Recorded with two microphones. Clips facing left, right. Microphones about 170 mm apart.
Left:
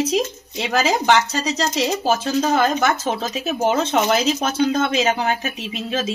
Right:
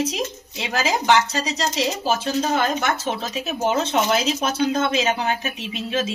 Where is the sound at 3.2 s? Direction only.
40° left (ahead or behind).